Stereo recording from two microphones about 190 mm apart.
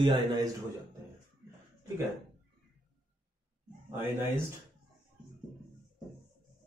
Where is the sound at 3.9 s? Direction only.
10° right (ahead or behind).